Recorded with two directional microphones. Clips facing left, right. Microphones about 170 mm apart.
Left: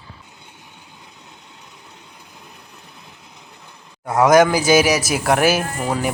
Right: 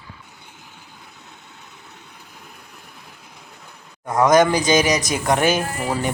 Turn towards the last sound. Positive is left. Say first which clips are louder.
# left 1 dB
turn(degrees=-5)  # may be behind; listen again after turning